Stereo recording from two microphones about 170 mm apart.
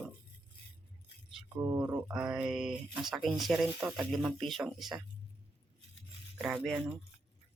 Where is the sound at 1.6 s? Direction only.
20° right (ahead or behind).